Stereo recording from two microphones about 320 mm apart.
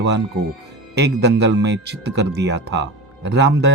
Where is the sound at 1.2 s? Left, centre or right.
Right.